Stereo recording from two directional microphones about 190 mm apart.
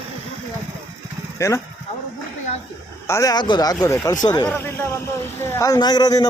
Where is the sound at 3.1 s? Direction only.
20° left (ahead or behind).